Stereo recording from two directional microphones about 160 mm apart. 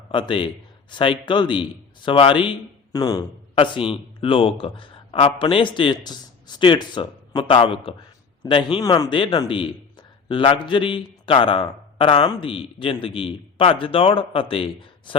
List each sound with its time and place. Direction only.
0.1 s a man's voice: 30° left (ahead or behind)